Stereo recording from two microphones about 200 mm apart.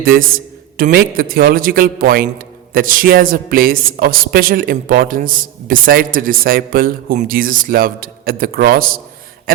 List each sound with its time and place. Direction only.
0.0 s speech: 45° right (ahead or behind)